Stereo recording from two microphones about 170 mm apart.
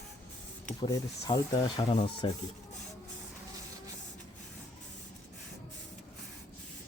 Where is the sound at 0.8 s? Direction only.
25° left (ahead or behind).